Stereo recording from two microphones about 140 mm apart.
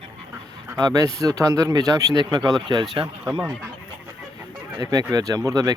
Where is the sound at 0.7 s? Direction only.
25° right (ahead or behind).